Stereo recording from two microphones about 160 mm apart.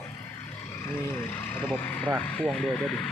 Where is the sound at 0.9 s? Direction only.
15° left (ahead or behind).